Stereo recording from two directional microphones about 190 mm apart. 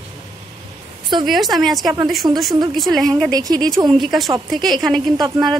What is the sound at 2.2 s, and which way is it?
Speech, 20° right (ahead or behind).